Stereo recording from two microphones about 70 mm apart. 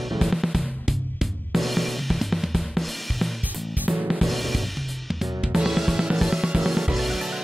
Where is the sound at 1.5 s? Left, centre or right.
Centre.